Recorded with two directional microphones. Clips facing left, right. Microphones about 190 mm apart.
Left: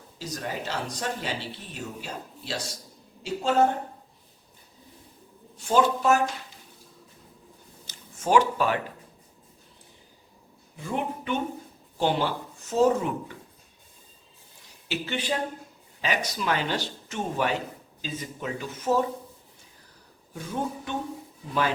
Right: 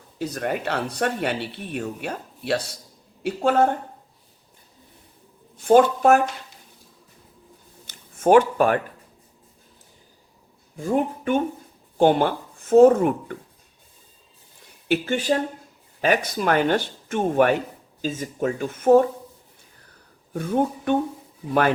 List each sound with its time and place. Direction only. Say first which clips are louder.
0.2 s speech: right 7 dB; 60° right (ahead or behind)
5.5 s speech: right 7 dB; 55° right (ahead or behind)
7.9 s a sound: right 9 dB; 55° right (ahead or behind)
10.8 s speech: right 8 dB; 45° right (ahead or behind)
14.8 s speech: right 8 dB; 50° right (ahead or behind)
20.3 s speech: right 8 dB; 60° right (ahead or behind)